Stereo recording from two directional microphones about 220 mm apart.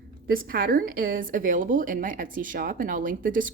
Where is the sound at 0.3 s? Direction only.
40° right (ahead or behind).